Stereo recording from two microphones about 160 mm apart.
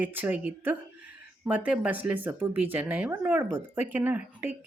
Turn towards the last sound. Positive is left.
turn(degrees=-10)  # may be behind; listen again after turning